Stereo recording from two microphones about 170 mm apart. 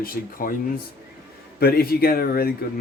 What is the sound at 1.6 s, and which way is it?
Speech, 65° left (ahead or behind).